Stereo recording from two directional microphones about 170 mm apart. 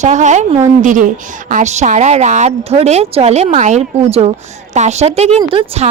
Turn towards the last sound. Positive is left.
turn(degrees=-40)  # may be behind; listen again after turning